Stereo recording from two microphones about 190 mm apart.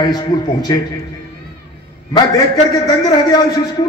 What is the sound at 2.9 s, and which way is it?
Speech, 20° left (ahead or behind).